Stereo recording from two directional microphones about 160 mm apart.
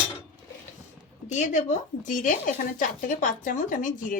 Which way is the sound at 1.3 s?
50° left (ahead or behind).